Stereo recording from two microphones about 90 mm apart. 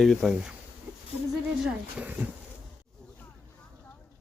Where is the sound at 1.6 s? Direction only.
15° right (ahead or behind).